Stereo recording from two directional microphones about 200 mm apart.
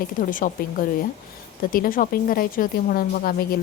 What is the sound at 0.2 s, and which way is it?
A woman's voice, 40° left (ahead or behind).